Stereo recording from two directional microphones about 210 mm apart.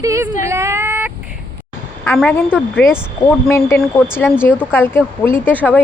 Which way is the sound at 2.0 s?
5° left (ahead or behind).